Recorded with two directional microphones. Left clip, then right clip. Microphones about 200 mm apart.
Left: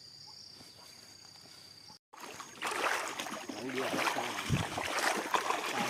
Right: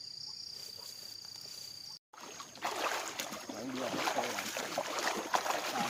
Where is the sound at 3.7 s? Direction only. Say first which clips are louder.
Left 3 dB; 55° left (ahead or behind).